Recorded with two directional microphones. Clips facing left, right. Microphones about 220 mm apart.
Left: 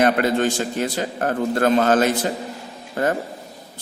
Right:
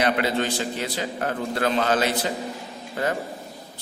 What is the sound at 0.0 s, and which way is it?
A man's voice, 50° left (ahead or behind).